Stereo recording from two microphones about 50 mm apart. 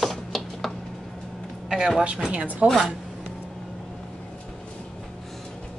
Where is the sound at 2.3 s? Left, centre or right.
Right.